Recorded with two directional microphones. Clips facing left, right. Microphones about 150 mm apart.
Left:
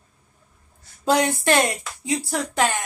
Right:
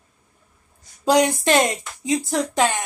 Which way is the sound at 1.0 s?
15° right (ahead or behind).